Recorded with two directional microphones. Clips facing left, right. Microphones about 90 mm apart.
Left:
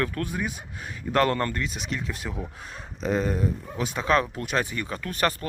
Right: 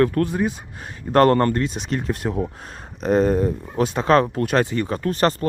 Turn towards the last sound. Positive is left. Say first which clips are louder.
# right 7 dB
turn(degrees=-30)  # may be behind; listen again after turning